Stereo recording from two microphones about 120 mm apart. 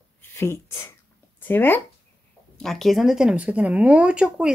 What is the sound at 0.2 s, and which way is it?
Speech, 20° left (ahead or behind).